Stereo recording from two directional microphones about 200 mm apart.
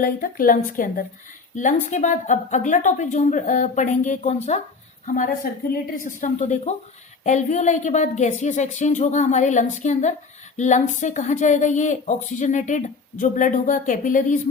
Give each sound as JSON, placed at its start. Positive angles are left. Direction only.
{"t": 0.0, "sound": "a woman's voice", "side_deg": 45}